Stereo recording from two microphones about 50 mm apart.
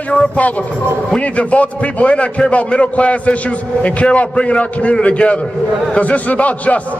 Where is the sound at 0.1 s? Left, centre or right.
Left.